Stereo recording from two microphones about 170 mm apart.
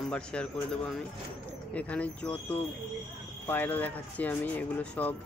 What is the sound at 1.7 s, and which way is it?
Speech, 10° left (ahead or behind).